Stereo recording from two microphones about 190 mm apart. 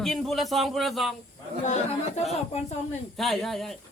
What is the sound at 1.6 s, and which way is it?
Speech, 40° left (ahead or behind).